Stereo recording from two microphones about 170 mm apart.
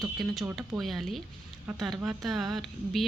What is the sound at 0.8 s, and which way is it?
Speech, centre (ahead or behind).